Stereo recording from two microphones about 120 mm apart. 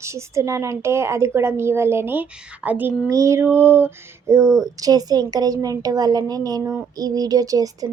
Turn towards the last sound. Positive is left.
turn(degrees=-30)  # may be behind; listen again after turning